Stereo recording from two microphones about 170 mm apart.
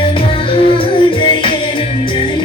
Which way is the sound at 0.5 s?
30° left (ahead or behind).